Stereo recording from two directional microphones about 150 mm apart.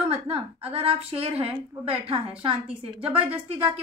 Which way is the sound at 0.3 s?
40° right (ahead or behind).